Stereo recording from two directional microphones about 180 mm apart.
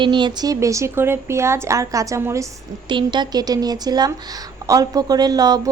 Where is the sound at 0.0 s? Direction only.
25° right (ahead or behind).